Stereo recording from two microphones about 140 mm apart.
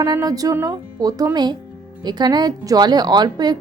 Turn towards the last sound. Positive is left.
turn(degrees=-30)  # may be behind; listen again after turning